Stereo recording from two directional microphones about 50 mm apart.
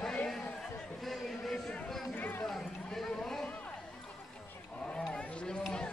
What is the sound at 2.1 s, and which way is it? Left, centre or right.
Run, left.